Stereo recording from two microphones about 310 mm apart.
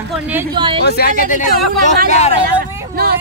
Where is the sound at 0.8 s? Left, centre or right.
Left.